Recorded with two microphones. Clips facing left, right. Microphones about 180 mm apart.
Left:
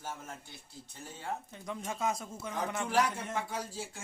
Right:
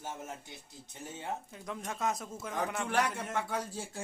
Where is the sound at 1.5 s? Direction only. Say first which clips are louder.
Left 1 dB; centre (ahead or behind).